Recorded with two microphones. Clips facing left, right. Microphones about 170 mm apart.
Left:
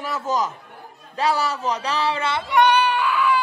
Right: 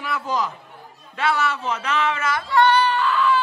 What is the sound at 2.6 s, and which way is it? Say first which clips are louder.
Screaming: even; 15° left (ahead or behind).